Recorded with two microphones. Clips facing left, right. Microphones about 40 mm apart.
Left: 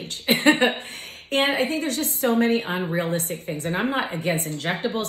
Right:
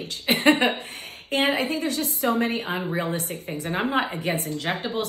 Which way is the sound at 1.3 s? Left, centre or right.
Left.